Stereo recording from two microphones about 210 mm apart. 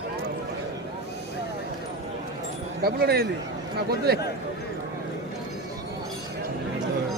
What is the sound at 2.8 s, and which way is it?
A man's voice, 50° right (ahead or behind).